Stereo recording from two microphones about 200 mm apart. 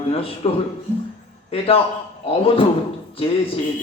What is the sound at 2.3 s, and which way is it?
Speech, 25° left (ahead or behind).